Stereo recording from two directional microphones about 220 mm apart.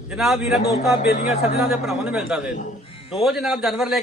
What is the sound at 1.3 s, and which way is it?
Speech, 30° left (ahead or behind).